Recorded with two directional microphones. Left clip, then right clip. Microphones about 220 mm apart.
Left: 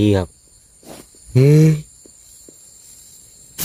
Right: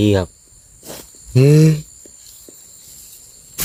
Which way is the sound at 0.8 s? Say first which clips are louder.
Right 4 dB; 45° right (ahead or behind).